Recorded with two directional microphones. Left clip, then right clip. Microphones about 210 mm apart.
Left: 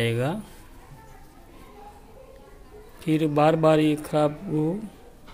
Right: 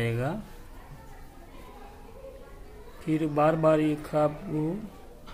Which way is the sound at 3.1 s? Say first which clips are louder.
Left 4 dB; 45° left (ahead or behind).